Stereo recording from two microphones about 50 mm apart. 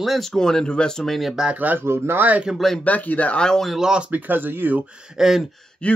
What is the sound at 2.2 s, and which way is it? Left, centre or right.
Speech, right.